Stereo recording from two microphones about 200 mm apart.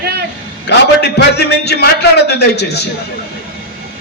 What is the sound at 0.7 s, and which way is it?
A man's voice, 55° left (ahead or behind).